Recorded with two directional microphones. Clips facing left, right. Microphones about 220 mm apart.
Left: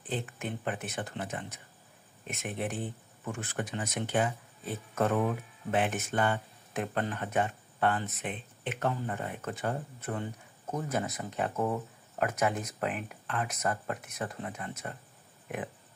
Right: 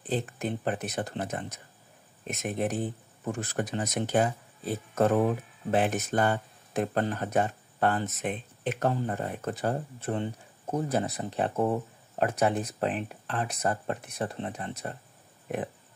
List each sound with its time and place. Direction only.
0.0 s speech: 35° right (ahead or behind)